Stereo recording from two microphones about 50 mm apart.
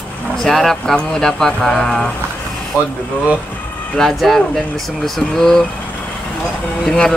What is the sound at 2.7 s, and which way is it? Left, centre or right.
Speech, left.